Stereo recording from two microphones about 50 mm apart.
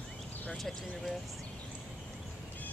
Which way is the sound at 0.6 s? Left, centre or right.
Centre.